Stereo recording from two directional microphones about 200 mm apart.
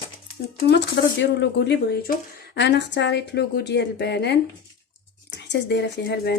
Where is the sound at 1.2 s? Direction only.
60° left (ahead or behind).